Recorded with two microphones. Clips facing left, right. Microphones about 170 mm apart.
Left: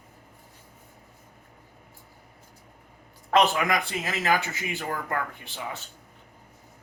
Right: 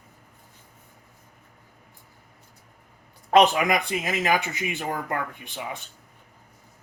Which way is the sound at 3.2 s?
20° right (ahead or behind).